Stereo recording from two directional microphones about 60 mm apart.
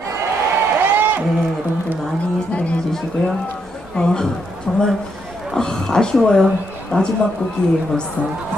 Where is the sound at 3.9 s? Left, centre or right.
Centre.